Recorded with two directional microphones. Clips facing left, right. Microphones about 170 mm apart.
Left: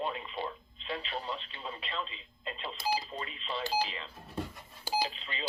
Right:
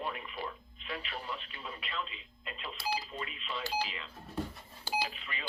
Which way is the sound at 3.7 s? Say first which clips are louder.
Left 3 dB; 30° left (ahead or behind).